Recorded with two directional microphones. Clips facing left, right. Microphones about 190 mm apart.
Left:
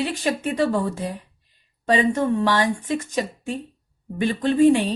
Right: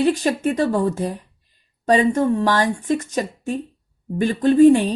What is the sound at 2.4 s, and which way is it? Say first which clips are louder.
A woman's voice: right 2 dB; 45° right (ahead or behind).